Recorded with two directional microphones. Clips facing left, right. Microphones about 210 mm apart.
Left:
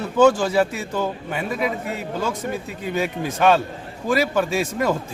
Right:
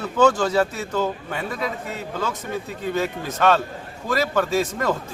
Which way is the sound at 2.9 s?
15° left (ahead or behind).